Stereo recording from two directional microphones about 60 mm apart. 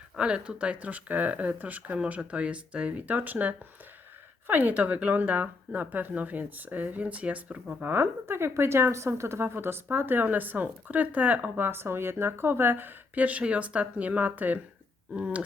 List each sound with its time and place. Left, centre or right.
0.2 s speech: centre
11.6 s speech: right; by 15.4 s centre